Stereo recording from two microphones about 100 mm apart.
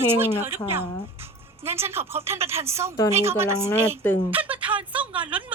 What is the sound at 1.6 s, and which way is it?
A woman's voice, 25° right (ahead or behind).